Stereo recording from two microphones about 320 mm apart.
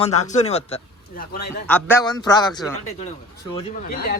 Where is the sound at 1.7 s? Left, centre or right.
Centre.